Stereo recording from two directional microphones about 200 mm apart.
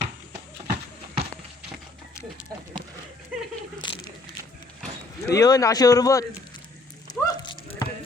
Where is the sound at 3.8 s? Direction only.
20° left (ahead or behind).